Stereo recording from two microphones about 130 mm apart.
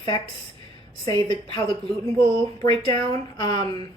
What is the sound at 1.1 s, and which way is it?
Speech, 35° left (ahead or behind).